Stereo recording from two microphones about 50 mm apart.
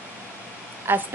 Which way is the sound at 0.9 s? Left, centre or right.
Right.